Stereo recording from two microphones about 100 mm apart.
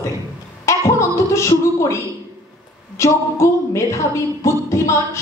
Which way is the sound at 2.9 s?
30° left (ahead or behind).